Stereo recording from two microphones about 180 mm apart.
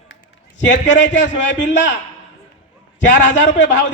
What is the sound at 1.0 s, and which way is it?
Speech, 40° left (ahead or behind).